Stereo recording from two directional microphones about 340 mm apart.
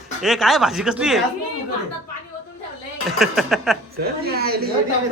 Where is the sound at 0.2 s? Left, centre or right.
Centre.